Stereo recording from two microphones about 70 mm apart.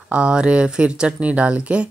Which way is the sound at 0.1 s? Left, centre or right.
Centre.